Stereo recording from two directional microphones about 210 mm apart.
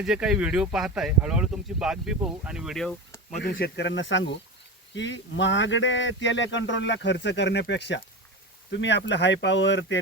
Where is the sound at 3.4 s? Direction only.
55° left (ahead or behind).